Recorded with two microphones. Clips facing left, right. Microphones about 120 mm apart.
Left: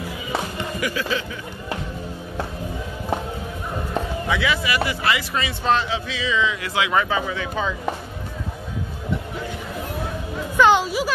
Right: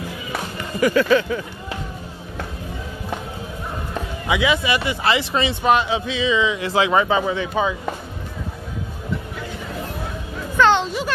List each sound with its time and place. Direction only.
0.9 s speech: 60° right (ahead or behind)
4.3 s speech: 20° right (ahead or behind)
5.6 s speech: 15° right (ahead or behind)
10.5 s a sound: 10° left (ahead or behind)